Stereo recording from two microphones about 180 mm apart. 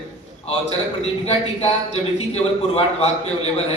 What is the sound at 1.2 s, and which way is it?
A man's voice, 35° left (ahead or behind).